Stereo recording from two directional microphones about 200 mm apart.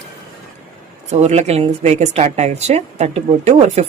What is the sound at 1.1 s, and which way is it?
A woman's voice, 35° right (ahead or behind).